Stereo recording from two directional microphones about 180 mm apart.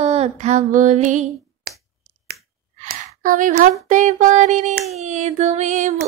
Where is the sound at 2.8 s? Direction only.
45° right (ahead or behind).